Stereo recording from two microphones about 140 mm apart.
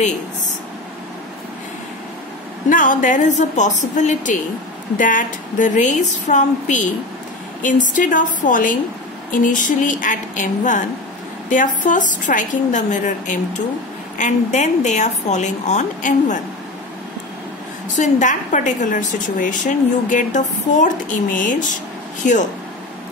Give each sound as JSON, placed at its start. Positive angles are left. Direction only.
{"t": 2.7, "sound": "a woman's voice", "side_deg": 70}
{"t": 17.9, "sound": "a woman's voice", "side_deg": 60}